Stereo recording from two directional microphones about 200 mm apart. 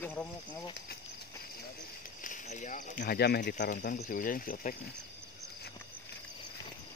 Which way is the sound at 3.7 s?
40° left (ahead or behind).